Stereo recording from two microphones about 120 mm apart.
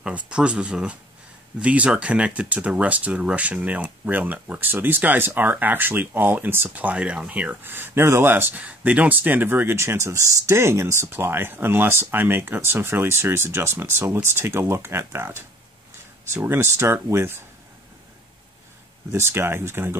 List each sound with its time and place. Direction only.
0.0 s speech: 10° right (ahead or behind)
19.1 s speech: 20° right (ahead or behind)